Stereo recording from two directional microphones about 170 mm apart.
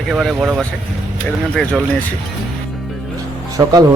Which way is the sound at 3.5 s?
20° right (ahead or behind).